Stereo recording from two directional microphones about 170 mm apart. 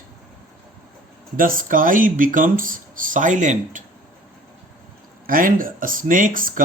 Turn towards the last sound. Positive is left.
turn(degrees=-55)  # may be behind; listen again after turning